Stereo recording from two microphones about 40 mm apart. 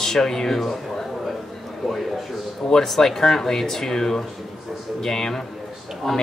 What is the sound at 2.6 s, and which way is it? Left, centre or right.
Speech, centre.